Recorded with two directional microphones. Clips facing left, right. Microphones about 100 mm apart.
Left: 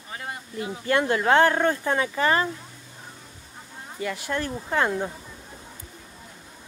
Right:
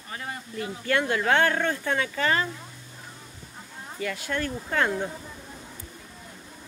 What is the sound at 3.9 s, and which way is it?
Speech, 25° left (ahead or behind).